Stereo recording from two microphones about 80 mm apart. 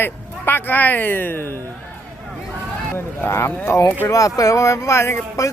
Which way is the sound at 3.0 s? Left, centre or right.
Left.